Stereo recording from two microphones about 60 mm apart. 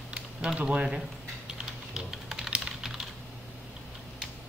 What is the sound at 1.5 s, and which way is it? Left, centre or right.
Typing, centre.